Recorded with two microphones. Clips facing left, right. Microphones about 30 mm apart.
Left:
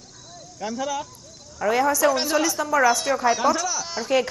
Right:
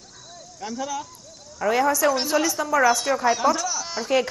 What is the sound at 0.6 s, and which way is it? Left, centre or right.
Speech, left.